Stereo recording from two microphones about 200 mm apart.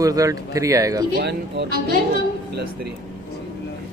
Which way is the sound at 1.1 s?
55° right (ahead or behind).